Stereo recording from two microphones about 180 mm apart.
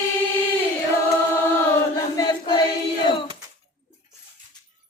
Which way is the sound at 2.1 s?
20° left (ahead or behind).